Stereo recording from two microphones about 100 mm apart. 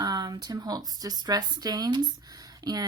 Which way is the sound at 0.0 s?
45° right (ahead or behind).